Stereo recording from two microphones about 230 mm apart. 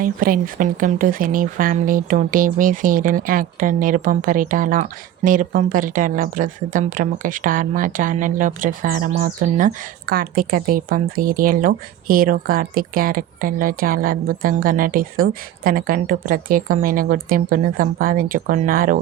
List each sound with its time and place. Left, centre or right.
0.0 s speech: right